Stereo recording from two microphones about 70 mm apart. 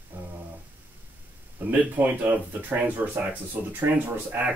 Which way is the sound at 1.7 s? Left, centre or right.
Right.